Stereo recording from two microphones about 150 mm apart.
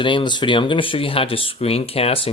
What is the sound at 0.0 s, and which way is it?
Speech, 30° left (ahead or behind).